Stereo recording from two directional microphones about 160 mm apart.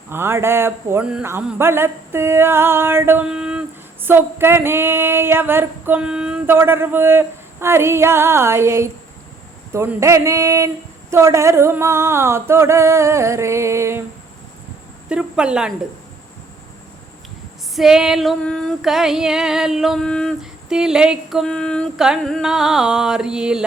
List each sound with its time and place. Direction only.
0.1 s female singing: 15° right (ahead or behind)
9.7 s a sound: 15° right (ahead or behind)
11.1 s female singing: 15° right (ahead or behind)
15.1 s female singing: 5° right (ahead or behind)
17.7 s female singing: 5° right (ahead or behind)